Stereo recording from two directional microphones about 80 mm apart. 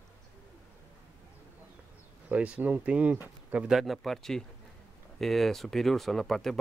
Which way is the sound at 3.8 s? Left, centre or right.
Centre.